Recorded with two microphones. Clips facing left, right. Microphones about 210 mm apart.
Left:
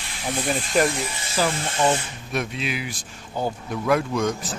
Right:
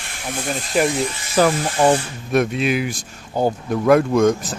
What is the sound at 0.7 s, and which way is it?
Speech, centre (ahead or behind).